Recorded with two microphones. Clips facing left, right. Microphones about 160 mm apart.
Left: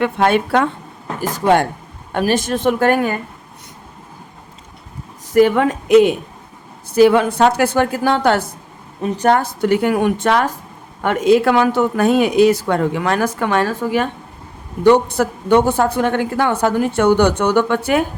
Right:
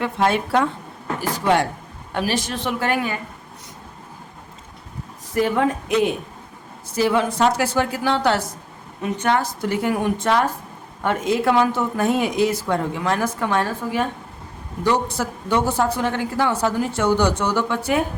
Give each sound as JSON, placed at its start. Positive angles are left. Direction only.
{"t": 0.0, "sound": "a woman's voice", "side_deg": 65}
{"t": 1.2, "sound": "a woman's voice", "side_deg": 50}
{"t": 5.3, "sound": "a woman's voice", "side_deg": 80}
{"t": 6.9, "sound": "a woman's voice", "side_deg": 65}
{"t": 9.0, "sound": "a woman's voice", "side_deg": 35}
{"t": 9.4, "sound": "a woman's voice", "side_deg": 60}
{"t": 14.8, "sound": "a woman's voice", "side_deg": 60}